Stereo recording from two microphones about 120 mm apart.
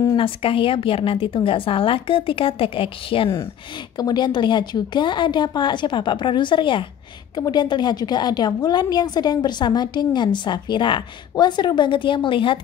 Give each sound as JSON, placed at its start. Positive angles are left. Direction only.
{"t": 0.2, "sound": "a woman's voice", "side_deg": 50}
{"t": 4.0, "sound": "a woman's voice", "side_deg": 35}